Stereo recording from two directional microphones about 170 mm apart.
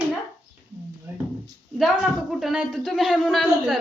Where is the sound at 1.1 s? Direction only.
15° right (ahead or behind).